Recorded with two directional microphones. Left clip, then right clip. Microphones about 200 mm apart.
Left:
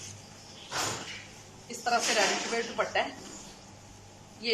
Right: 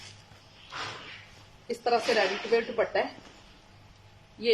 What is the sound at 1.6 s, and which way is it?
Speech, 25° right (ahead or behind).